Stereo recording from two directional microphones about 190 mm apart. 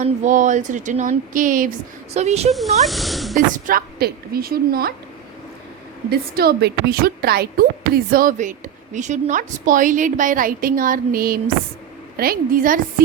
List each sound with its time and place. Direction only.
0.0 s speech: 40° right (ahead or behind)
2.1 s speech: 35° right (ahead or behind)
2.5 s speech: centre (ahead or behind)
3.3 s a woman's voice: 45° right (ahead or behind)
6.1 s a woman's voice: 55° right (ahead or behind)